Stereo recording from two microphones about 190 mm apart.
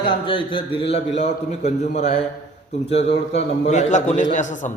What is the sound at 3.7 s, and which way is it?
A man's voice, 40° left (ahead or behind).